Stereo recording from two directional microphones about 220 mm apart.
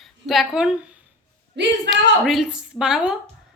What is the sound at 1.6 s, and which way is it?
Speech, 50° right (ahead or behind).